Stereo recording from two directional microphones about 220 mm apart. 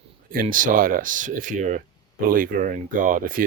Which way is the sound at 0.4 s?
35° right (ahead or behind).